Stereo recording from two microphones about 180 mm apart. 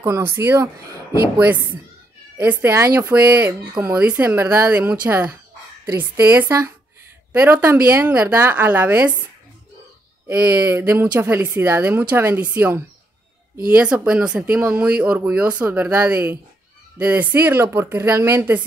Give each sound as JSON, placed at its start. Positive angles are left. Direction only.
{"t": 0.0, "sound": "speech", "side_deg": -15}
{"t": 0.8, "sound": "speech", "side_deg": -60}
{"t": 1.4, "sound": "speech", "side_deg": -10}
{"t": 10.2, "sound": "speech", "side_deg": -10}